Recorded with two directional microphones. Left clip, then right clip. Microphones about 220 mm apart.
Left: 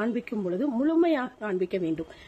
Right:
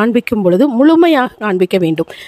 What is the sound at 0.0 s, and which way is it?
Speech, 50° right (ahead or behind).